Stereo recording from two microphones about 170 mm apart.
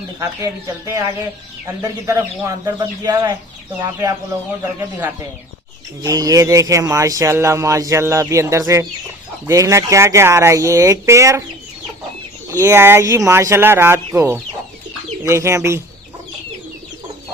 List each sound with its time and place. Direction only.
0.2 s speech: 20° right (ahead or behind)
6.0 s speech: 20° right (ahead or behind)
12.6 s speech: 15° right (ahead or behind)